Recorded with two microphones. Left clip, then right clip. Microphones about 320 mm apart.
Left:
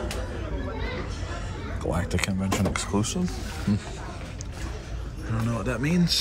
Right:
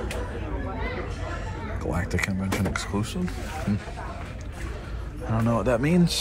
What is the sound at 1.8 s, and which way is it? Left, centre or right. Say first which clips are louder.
Speech: even; centre.